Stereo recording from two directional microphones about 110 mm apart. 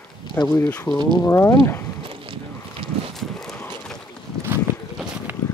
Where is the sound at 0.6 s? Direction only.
15° left (ahead or behind).